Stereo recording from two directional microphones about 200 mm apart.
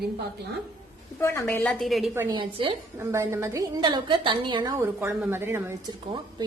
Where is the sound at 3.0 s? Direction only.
15° right (ahead or behind).